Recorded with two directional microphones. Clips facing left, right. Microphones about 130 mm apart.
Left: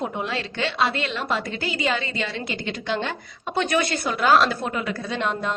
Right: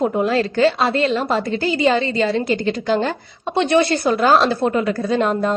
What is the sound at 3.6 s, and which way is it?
Speech, 30° right (ahead or behind).